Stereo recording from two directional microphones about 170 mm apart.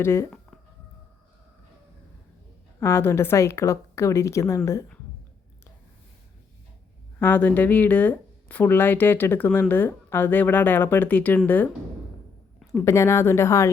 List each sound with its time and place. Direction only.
0.0 s speech: 15° left (ahead or behind)
2.8 s speech: 15° left (ahead or behind)
7.2 s speech: 10° left (ahead or behind)
12.7 s speech: 15° left (ahead or behind)